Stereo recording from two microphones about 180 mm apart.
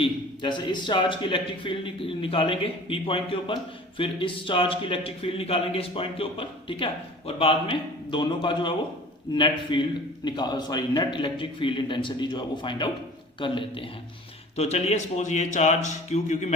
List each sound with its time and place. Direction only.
0.0 s a man's voice: 25° left (ahead or behind); by 16.5 s 40° left (ahead or behind)